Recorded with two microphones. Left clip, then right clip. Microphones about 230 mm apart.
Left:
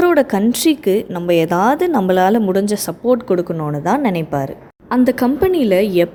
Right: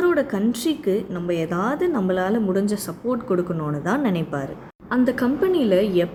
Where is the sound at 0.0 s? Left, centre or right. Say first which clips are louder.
Left 7 dB; left.